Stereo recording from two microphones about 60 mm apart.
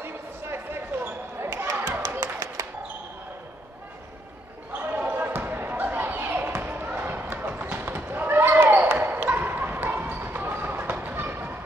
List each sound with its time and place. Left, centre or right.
0.0 s basketball bounce: right
4.9 s basketball bounce: right